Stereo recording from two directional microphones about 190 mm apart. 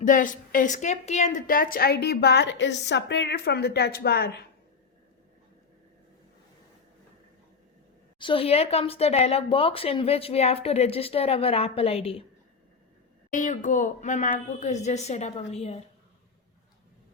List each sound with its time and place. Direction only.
0.0 s a woman's voice: 45° left (ahead or behind)
8.2 s speech: 30° left (ahead or behind)
13.3 s speech: 40° left (ahead or behind)